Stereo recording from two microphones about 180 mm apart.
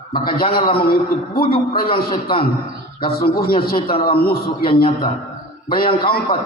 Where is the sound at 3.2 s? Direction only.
60° left (ahead or behind).